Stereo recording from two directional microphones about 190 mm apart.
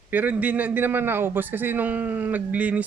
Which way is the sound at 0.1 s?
10° right (ahead or behind).